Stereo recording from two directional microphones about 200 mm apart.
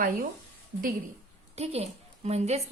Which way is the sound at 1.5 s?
30° right (ahead or behind).